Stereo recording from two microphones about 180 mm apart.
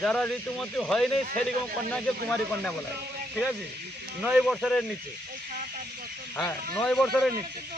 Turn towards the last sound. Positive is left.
turn(degrees=5)  # may be behind; listen again after turning